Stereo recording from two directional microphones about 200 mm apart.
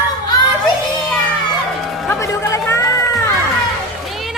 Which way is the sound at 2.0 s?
15° left (ahead or behind).